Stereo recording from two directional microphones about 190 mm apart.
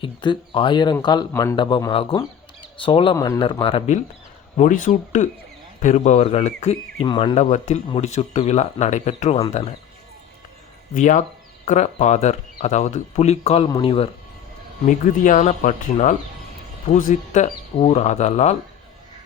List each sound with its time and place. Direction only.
0.0 s a man's voice: 25° left (ahead or behind)
7.3 s speech: 35° left (ahead or behind)
10.9 s speech: 40° left (ahead or behind)
13.7 s speech: 20° left (ahead or behind)
14.8 s speech: 40° left (ahead or behind)